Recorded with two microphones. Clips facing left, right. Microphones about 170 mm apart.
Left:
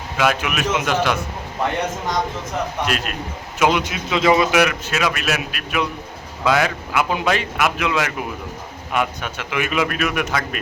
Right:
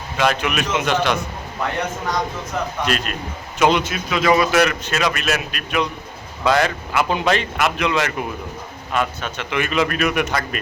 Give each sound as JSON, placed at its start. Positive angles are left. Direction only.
{"t": 0.2, "sound": "a man's voice", "side_deg": 5}
{"t": 2.8, "sound": "a man's voice", "side_deg": 5}
{"t": 3.9, "sound": "speech", "side_deg": 20}
{"t": 4.5, "sound": "a man's voice", "side_deg": 5}